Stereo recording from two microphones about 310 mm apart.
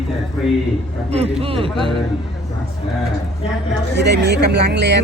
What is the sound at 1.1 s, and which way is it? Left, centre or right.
Speech, centre.